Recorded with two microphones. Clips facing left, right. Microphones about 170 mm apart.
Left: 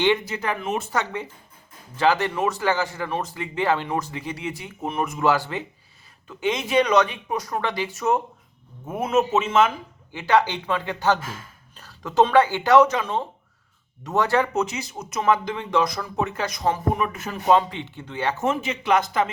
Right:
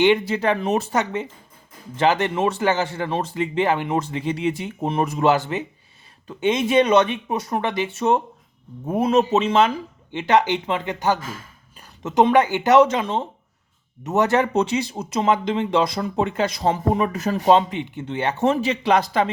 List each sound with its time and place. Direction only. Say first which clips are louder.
0.3 s speech: right 6 dB; 30° right (ahead or behind)
0.9 s speech: right 4 dB; 20° right (ahead or behind)
17.5 s speech: right 2 dB; 20° right (ahead or behind)